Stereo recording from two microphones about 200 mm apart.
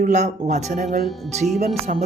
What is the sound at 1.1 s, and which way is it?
Speech, centre (ahead or behind).